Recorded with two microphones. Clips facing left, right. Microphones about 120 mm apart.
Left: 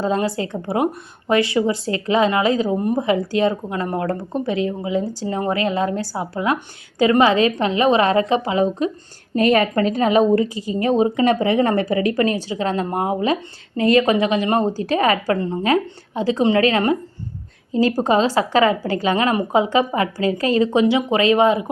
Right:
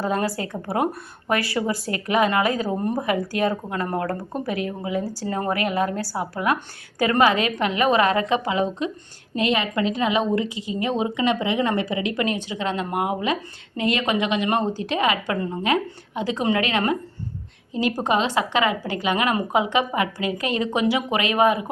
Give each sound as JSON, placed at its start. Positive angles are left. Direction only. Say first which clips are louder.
{"t": 0.0, "sound": "a woman's voice", "louder": "left 4 dB", "side_deg": 25}
{"t": 2.6, "sound": "speech", "louder": "left 4 dB", "side_deg": 10}
{"t": 3.0, "sound": "a woman's voice", "louder": "left 5 dB", "side_deg": 25}